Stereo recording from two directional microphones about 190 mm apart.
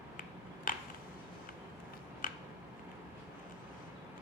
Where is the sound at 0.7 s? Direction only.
45° left (ahead or behind).